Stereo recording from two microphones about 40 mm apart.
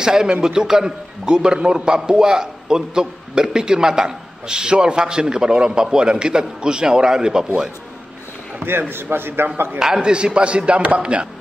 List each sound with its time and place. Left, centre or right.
0.0 s a man's voice: centre
8.6 s a man's voice: right
9.8 s a man's voice: centre
10.0 s a man's voice: right